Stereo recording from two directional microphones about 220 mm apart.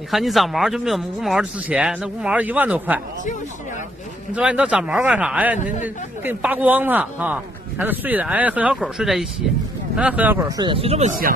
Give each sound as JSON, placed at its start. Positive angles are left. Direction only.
{"t": 0.1, "sound": "speech", "side_deg": 0}
{"t": 4.3, "sound": "a man's voice", "side_deg": -5}